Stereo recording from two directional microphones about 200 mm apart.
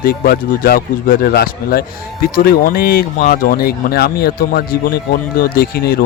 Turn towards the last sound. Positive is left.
turn(degrees=50)  # may be behind; listen again after turning